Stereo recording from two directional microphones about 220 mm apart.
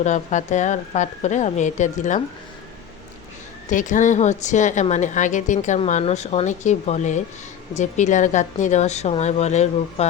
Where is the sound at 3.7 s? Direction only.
35° left (ahead or behind).